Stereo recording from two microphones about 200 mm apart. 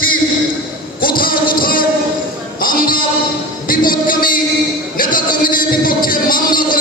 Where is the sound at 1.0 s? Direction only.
45° left (ahead or behind).